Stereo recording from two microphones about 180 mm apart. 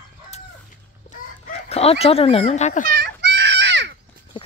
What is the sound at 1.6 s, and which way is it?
Speech, 35° left (ahead or behind).